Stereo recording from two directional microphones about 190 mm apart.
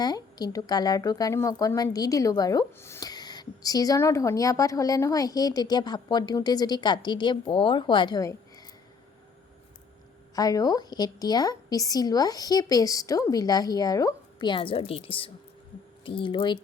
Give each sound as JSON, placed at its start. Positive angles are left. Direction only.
{"t": 0.0, "sound": "speech", "side_deg": 20}
{"t": 10.3, "sound": "speech", "side_deg": 20}